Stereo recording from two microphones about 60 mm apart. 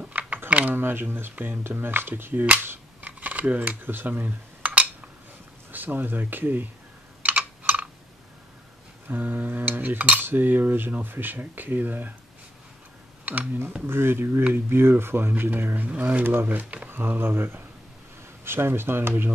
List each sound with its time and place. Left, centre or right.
0.0 s computer keyboard: right
0.5 s a sound: right
0.7 s cutlery: right
3.0 s cutlery: right
7.2 s computer keyboard: right
9.0 s cutlery: right
13.2 s computer keyboard: right
13.8 s cutlery: right
15.9 s speech: right
16.3 s cutlery: right